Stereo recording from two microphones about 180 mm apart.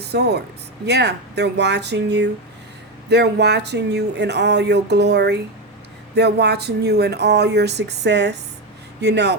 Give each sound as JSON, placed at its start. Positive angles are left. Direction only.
{"t": 0.0, "sound": "speech", "side_deg": -65}